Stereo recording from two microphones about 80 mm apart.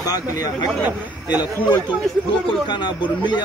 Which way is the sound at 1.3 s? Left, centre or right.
Left.